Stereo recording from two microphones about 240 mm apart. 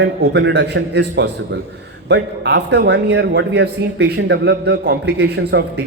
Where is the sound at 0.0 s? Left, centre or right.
Right.